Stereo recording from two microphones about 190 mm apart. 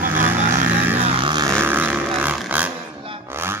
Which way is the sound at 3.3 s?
10° right (ahead or behind).